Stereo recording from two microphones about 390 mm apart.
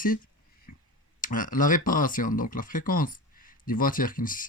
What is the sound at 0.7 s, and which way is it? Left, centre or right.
Finger snapping, left.